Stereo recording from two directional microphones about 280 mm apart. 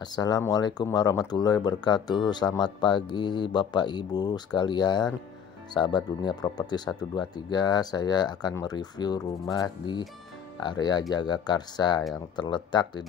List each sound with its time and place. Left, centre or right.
0.0 s speech: centre